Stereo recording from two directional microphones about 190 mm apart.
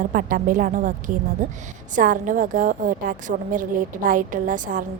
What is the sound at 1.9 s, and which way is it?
A woman's voice, 45° right (ahead or behind).